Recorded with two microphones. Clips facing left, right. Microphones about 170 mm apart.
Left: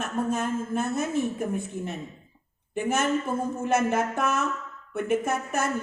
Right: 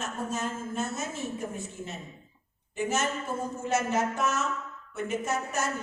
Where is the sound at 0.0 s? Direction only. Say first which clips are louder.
Left 5 dB; 55° left (ahead or behind).